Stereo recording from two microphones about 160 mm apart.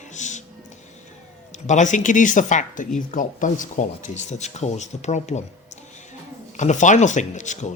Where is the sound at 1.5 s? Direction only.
50° left (ahead or behind).